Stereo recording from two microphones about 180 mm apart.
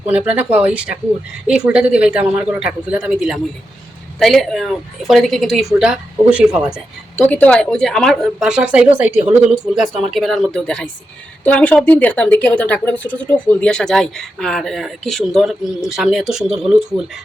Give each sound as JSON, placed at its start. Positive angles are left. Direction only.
{"t": 0.1, "sound": "a woman's voice", "side_deg": -10}
{"t": 6.7, "sound": "a woman's voice", "side_deg": 10}